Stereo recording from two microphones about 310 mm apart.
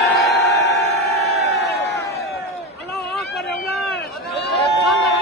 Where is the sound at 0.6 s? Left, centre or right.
Left.